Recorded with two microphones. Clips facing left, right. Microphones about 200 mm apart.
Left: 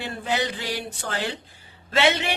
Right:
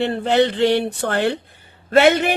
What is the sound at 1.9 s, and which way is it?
Speech, 50° right (ahead or behind).